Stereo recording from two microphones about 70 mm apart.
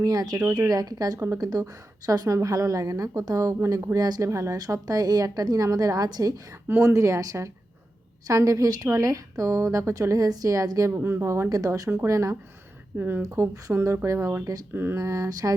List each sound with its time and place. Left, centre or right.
0.0 s a woman's voice: right
3.9 s a woman's voice: right
6.7 s a woman's voice: right
10.9 s speech: right
11.3 s a woman's voice: right
13.0 s speech: right
13.2 s a woman's voice: right
14.7 s speech: right
14.9 s a woman's voice: right